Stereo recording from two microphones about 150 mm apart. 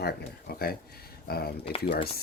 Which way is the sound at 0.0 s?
90° left.